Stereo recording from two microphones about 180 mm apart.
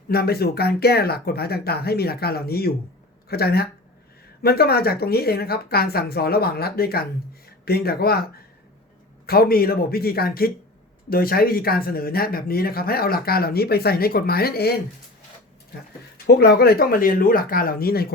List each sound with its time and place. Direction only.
0.1 s speech: 60° left (ahead or behind)
16.2 s speech: 60° left (ahead or behind)